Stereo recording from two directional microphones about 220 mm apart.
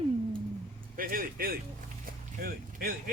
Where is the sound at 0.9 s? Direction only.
40° right (ahead or behind).